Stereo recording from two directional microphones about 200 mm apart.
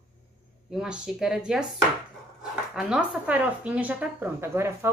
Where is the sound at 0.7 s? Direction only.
5° right (ahead or behind).